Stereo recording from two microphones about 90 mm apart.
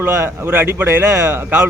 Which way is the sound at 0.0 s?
25° right (ahead or behind).